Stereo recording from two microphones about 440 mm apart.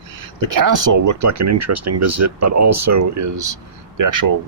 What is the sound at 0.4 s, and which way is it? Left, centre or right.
Speech, right.